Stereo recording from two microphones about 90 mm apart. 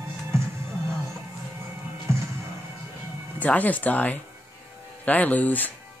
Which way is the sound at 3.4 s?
15° left (ahead or behind).